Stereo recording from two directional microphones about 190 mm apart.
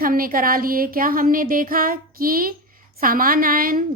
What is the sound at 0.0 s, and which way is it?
Speech, 50° right (ahead or behind).